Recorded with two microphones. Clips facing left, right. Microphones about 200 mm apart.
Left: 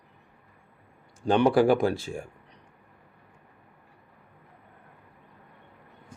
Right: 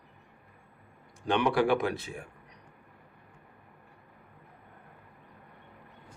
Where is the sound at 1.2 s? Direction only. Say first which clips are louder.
Left 6 dB; 35° left (ahead or behind).